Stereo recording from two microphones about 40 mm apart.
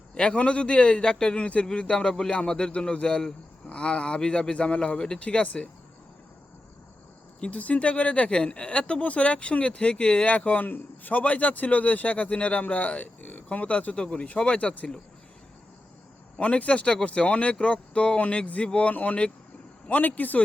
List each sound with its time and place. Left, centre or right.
0.1 s speech: left
4.9 s speech: centre
5.2 s speech: left
7.5 s a man's voice: left
10.7 s a man's voice: left
16.4 s speech: left
19.9 s a man's voice: left